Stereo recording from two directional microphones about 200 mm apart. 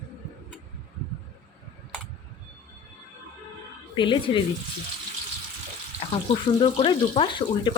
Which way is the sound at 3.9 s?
25° left (ahead or behind).